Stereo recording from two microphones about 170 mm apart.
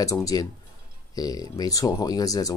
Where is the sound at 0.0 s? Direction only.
20° left (ahead or behind).